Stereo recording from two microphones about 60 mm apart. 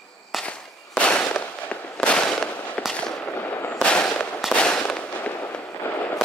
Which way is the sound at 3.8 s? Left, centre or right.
Centre.